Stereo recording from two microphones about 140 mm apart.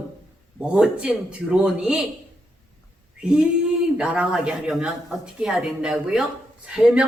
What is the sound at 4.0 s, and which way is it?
A man's voice, 5° right (ahead or behind).